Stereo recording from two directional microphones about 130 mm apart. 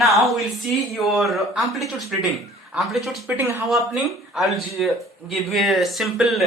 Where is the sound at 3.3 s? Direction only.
15° right (ahead or behind).